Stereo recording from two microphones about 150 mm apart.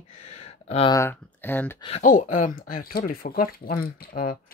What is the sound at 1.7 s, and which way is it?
Speech, 40° left (ahead or behind).